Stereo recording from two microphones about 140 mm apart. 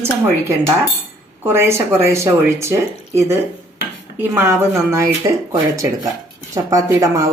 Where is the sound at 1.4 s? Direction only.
15° right (ahead or behind).